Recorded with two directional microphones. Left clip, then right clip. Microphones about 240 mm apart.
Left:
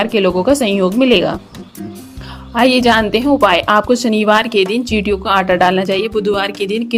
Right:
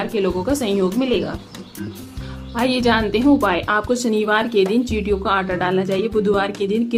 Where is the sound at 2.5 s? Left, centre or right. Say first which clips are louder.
Left 7 dB; left.